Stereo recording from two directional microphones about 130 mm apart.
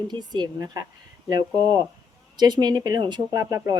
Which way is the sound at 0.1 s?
35° right (ahead or behind).